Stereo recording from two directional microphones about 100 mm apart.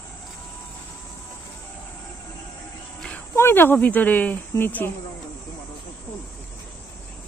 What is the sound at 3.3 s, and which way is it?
Speech, 25° left (ahead or behind).